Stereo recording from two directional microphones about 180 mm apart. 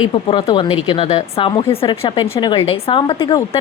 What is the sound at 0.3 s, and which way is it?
Speech, 25° left (ahead or behind).